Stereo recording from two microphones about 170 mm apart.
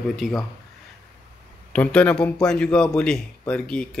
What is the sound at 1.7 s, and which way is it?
A man's voice, 5° left (ahead or behind).